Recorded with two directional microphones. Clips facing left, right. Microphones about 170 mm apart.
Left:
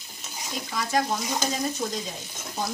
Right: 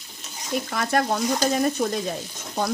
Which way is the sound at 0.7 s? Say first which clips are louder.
Right 2 dB; 60° right (ahead or behind).